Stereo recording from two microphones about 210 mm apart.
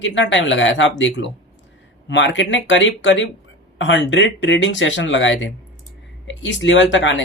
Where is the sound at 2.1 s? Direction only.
60° left (ahead or behind).